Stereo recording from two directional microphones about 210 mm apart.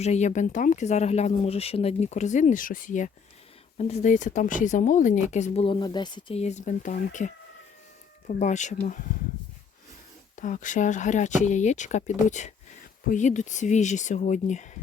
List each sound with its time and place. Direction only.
0.0 s speech: 30° left (ahead or behind)
10.3 s speech: 35° left (ahead or behind)